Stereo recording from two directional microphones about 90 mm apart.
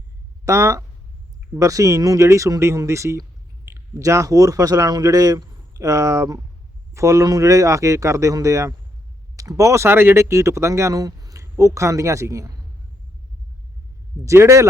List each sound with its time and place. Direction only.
0.4 s speech: 35° right (ahead or behind)
14.3 s speech: 35° right (ahead or behind)